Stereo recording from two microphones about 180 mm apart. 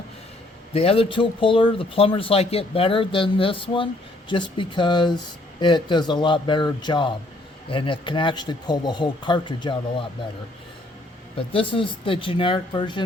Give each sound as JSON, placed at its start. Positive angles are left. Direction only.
{"t": 0.7, "sound": "speech", "side_deg": 35}
{"t": 11.3, "sound": "speech", "side_deg": 30}